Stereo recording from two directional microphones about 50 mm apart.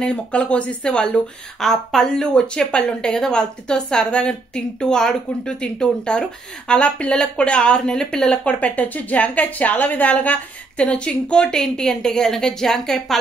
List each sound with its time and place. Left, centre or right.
0.0 s speech: centre
1.6 s a woman's voice: centre
2.3 s a woman's voice: centre
8.5 s a woman's voice: left
10.9 s speech: left
11.6 s a woman's voice: centre